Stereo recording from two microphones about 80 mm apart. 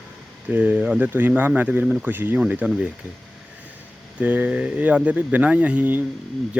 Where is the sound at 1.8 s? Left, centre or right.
Centre.